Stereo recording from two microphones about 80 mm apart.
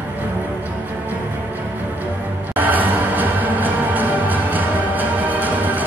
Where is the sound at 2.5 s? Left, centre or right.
Right.